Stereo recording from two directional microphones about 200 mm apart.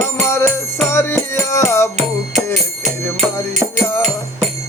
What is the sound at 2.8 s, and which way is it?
Music, 35° right (ahead or behind).